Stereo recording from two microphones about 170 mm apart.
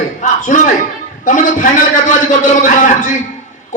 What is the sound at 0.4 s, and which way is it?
A man's voice, 50° left (ahead or behind).